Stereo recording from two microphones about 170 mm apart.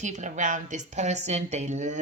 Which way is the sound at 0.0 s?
45° right (ahead or behind).